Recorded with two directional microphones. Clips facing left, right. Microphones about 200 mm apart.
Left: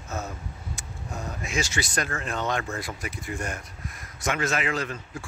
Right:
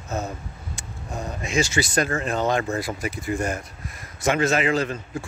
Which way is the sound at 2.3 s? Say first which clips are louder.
Right 6 dB; 35° right (ahead or behind).